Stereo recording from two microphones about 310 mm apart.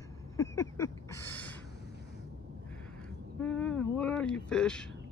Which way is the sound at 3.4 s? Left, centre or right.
Centre.